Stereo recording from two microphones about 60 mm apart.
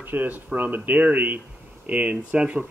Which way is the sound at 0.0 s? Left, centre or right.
Right.